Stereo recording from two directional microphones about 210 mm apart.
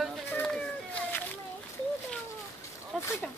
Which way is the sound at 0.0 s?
5° left (ahead or behind).